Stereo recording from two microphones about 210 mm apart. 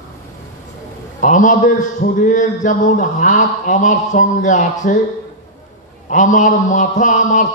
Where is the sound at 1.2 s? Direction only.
40° left (ahead or behind).